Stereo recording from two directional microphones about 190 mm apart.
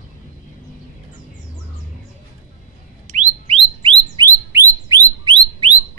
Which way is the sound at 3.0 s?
35° right (ahead or behind).